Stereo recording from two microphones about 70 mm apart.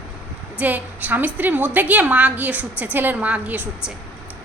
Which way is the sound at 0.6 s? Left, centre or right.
Right.